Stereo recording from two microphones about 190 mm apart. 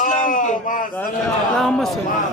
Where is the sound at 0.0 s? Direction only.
40° left (ahead or behind).